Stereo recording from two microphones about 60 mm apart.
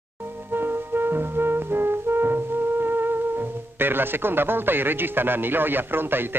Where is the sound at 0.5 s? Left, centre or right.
Right.